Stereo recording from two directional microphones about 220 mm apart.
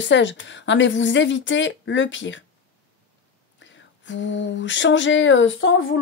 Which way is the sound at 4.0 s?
55° left (ahead or behind).